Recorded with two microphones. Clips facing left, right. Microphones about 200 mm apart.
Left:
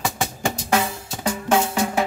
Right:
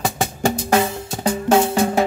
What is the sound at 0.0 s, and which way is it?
Drum, 35° right (ahead or behind).